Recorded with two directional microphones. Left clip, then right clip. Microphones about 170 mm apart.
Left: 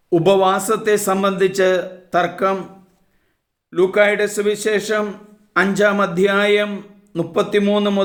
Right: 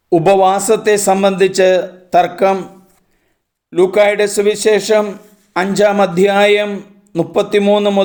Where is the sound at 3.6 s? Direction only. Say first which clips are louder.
Right 4 dB; 25° right (ahead or behind).